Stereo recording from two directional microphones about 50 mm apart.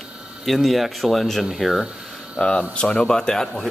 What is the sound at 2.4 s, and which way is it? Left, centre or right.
Speech, left.